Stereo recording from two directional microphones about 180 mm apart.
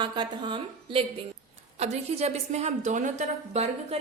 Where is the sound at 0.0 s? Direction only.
25° right (ahead or behind).